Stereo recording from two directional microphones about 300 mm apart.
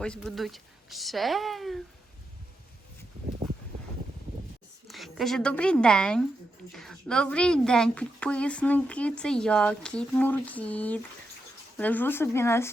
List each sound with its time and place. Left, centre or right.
0.0 s a woman's voice: centre
4.9 s a woman's voice: centre